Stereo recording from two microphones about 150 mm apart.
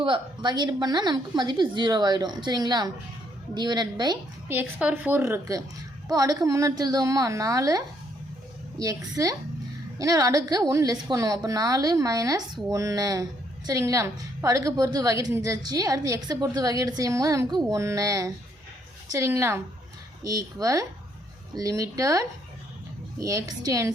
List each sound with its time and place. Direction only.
0.0 s a woman's voice: 30° right (ahead or behind)
4.4 s a woman's voice: 10° right (ahead or behind)